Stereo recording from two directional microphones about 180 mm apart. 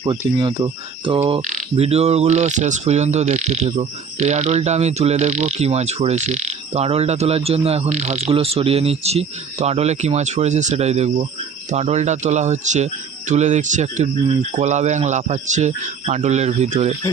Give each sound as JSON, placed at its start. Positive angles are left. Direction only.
{"t": 0.3, "sound": "speech", "side_deg": -25}
{"t": 1.4, "sound": "speech", "side_deg": -45}